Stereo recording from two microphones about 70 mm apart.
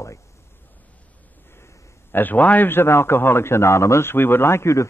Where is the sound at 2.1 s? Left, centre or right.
Left.